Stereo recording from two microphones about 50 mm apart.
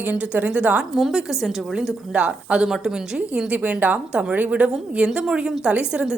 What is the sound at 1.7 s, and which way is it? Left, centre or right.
A woman's voice, right.